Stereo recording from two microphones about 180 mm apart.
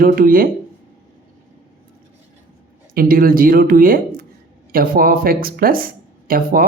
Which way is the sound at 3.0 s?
55° right (ahead or behind).